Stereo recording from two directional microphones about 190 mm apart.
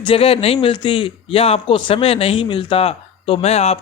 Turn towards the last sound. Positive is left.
turn(degrees=35)  # may be behind; listen again after turning